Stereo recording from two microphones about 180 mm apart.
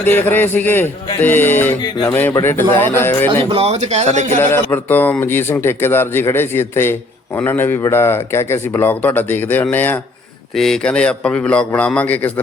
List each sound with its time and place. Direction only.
0.0 s a man's voice: 10° left (ahead or behind)
3.5 s speech: 35° right (ahead or behind)
4.4 s a man's voice: 10° left (ahead or behind)